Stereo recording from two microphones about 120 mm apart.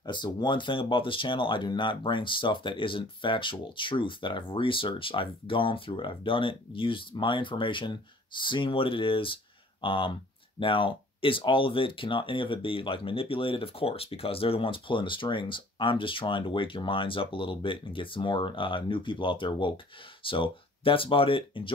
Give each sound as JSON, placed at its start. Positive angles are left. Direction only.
{"t": 0.0, "sound": "speech", "side_deg": 40}